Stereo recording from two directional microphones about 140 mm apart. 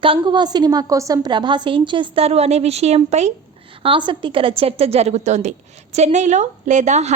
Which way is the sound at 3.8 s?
35° right (ahead or behind).